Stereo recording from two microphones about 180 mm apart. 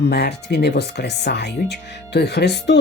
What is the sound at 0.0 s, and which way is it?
Speech, 65° left (ahead or behind).